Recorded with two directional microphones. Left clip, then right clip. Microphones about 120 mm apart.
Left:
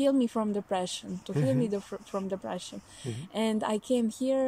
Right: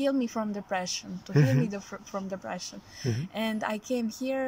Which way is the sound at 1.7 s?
35° left (ahead or behind).